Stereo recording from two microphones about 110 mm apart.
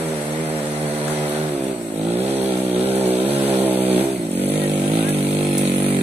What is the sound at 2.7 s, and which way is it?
Vehicle, 70° right (ahead or behind).